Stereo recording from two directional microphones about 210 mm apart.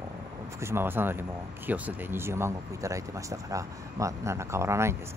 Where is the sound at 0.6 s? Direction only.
10° right (ahead or behind).